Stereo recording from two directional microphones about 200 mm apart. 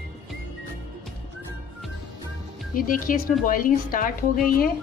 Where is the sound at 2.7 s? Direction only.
45° left (ahead or behind).